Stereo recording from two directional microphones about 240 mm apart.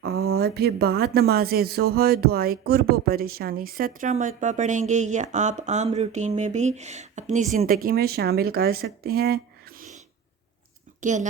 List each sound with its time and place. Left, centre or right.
0.0 s a sound: right
0.3 s speech: right
11.0 s a woman's voice: right